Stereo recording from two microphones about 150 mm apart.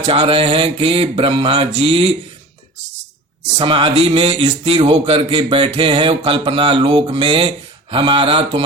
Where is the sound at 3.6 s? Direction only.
35° right (ahead or behind).